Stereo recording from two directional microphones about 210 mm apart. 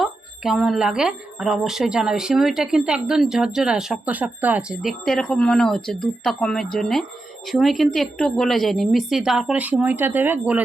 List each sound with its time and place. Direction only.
0.0 s speech: centre (ahead or behind)